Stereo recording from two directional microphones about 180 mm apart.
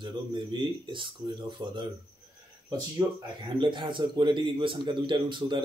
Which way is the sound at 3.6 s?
25° right (ahead or behind).